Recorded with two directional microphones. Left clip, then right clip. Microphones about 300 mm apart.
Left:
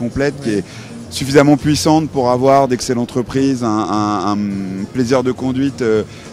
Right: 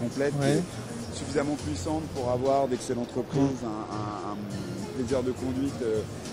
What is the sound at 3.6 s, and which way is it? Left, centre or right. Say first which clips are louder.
Mantra: left 17 dB; left.